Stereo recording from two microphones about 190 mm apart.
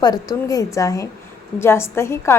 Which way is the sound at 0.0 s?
20° left (ahead or behind).